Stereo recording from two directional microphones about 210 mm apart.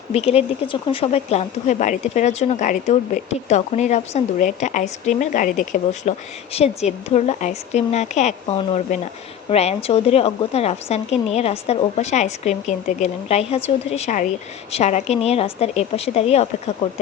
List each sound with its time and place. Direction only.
0.1 s a woman's voice: 30° left (ahead or behind)